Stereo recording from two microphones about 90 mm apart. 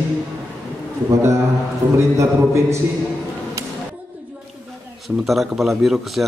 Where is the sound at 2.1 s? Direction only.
30° right (ahead or behind).